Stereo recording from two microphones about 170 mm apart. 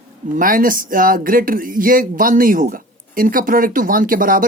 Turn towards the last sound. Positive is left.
turn(degrees=-55)  # may be behind; listen again after turning